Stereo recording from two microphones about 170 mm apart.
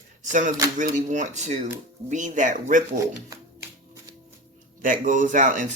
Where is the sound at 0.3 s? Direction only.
50° right (ahead or behind).